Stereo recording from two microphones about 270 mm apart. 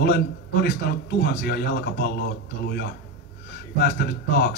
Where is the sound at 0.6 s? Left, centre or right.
Left.